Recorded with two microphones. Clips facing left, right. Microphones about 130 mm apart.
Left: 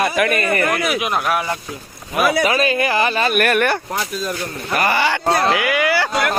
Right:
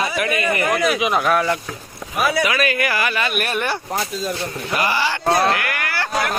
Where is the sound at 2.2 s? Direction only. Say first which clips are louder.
Left 3 dB; 55° left (ahead or behind).